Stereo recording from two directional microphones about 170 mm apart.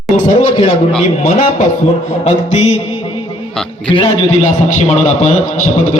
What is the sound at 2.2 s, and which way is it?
Speech, 40° left (ahead or behind).